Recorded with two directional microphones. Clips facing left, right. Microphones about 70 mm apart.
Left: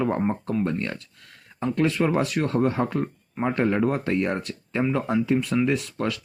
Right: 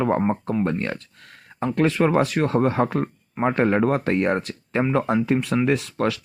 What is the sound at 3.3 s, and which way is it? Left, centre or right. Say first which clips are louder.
Speech: right 3 dB; right.